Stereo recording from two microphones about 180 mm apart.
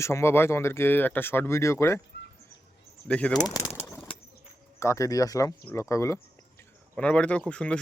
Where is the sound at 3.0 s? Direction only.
5° left (ahead or behind).